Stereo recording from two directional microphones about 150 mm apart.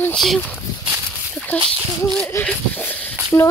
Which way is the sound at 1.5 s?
10° left (ahead or behind).